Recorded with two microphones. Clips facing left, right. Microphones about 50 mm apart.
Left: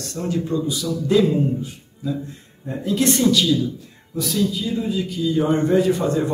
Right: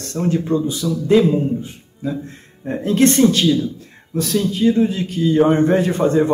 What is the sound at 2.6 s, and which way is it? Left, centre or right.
Speech, right.